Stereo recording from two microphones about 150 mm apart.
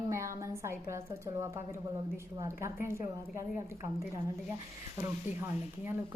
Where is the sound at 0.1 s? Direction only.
20° right (ahead or behind).